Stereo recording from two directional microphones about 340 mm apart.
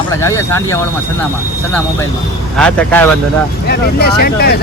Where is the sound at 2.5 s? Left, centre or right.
Centre.